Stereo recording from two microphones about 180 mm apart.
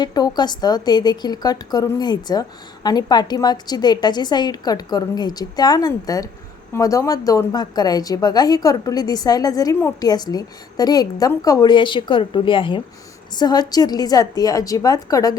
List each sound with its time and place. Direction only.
0.0 s a woman's voice: 20° left (ahead or behind)